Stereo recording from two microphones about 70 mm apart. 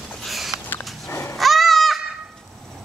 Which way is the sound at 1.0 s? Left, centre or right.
Left.